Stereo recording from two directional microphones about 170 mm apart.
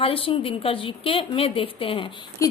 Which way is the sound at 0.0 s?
35° left (ahead or behind).